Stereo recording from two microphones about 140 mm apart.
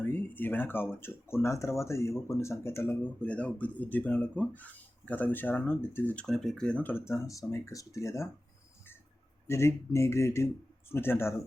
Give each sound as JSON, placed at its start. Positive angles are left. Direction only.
{"t": 0.0, "sound": "a sound", "side_deg": 15}
{"t": 0.9, "sound": "speech", "side_deg": 20}
{"t": 9.5, "sound": "speech", "side_deg": 20}